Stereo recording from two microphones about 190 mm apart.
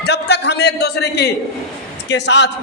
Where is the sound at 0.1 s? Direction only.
65° left (ahead or behind).